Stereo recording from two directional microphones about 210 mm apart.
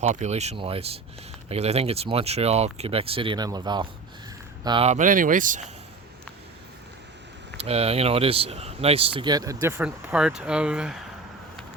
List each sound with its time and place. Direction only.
0.0 s speech: 35° right (ahead or behind)
7.6 s speech: 30° right (ahead or behind); by 11.0 s 5° right (ahead or behind)